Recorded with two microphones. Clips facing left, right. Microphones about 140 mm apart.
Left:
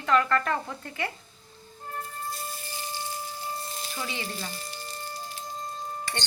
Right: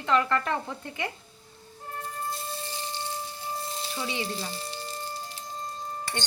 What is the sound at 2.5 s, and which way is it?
Music, 25° right (ahead or behind).